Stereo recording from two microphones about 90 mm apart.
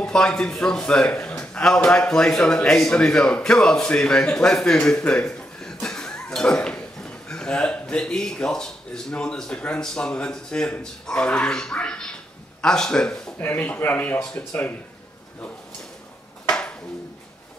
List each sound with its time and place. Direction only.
0.0 s a man's voice: 10° left (ahead or behind)
13.4 s speech: 20° left (ahead or behind)
16.4 s a sound: 10° left (ahead or behind)